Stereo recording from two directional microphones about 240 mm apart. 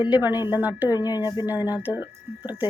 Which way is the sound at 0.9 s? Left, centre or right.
Centre.